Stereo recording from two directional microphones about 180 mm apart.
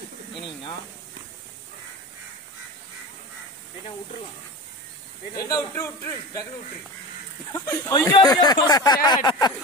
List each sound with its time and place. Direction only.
5.3 s speech: 20° left (ahead or behind)
7.5 s speech: 15° left (ahead or behind)